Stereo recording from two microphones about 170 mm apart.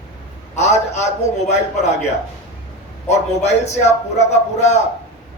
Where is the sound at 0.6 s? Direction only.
40° left (ahead or behind).